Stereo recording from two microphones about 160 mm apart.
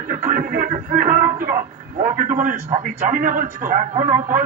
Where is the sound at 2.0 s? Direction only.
55° right (ahead or behind).